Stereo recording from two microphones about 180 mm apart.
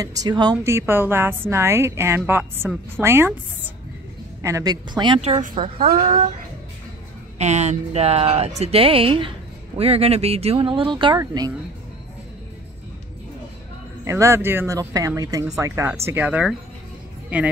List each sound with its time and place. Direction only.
0.0 s a woman's voice: 20° right (ahead or behind)
5.4 s speech: 45° right (ahead or behind)
7.3 s a woman's voice: 40° right (ahead or behind); by 11.5 s 20° right (ahead or behind)
14.0 s a woman's voice: 15° right (ahead or behind)